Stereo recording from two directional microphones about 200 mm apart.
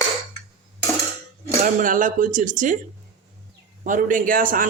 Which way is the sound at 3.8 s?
40° right (ahead or behind).